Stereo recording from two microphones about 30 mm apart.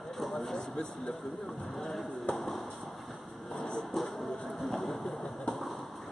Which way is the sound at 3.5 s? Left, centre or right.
Left.